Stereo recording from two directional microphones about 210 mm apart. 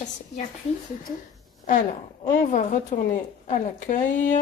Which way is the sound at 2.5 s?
40° left (ahead or behind).